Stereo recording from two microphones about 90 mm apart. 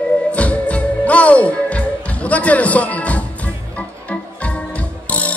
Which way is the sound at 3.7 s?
15° left (ahead or behind).